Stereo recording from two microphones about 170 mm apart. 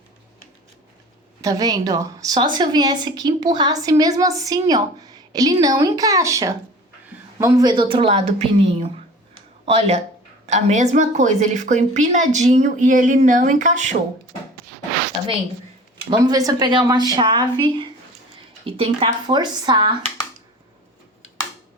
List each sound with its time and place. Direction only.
1.4 s a woman's voice: 20° right (ahead or behind); by 13.9 s 45° right (ahead or behind)
16.0 s a woman's voice: 25° right (ahead or behind)